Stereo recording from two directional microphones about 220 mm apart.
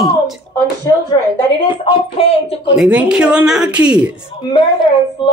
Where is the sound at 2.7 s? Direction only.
5° right (ahead or behind).